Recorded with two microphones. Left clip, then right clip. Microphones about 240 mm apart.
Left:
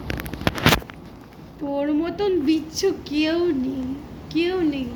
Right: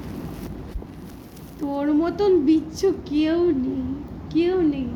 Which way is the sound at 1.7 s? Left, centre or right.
Centre.